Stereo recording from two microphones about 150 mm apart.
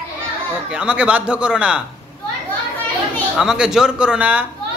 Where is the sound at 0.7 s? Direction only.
5° right (ahead or behind).